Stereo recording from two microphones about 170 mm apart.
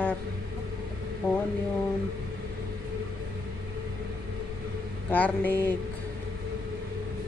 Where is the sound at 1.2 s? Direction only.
20° left (ahead or behind).